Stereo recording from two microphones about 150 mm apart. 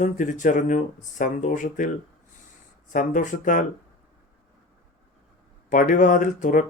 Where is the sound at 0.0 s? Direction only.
60° left (ahead or behind).